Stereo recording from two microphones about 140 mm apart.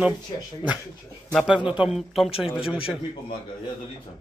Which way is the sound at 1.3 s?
5° right (ahead or behind).